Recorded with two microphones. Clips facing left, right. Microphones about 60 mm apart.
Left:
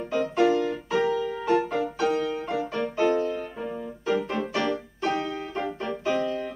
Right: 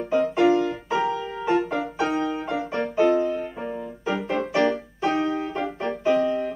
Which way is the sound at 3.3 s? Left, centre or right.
Centre.